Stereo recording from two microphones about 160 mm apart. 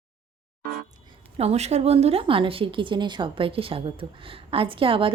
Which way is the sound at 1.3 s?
40° right (ahead or behind).